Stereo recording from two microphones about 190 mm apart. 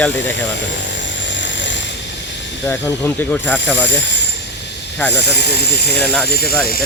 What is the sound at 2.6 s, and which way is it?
Speech, 10° left (ahead or behind).